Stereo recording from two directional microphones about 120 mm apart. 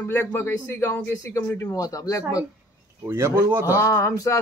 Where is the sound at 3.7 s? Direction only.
25° left (ahead or behind).